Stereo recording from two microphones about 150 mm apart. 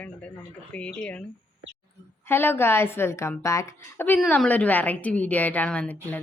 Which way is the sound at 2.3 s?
15° left (ahead or behind).